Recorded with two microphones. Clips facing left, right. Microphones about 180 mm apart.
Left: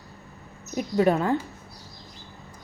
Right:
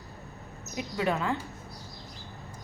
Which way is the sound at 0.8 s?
40° left (ahead or behind).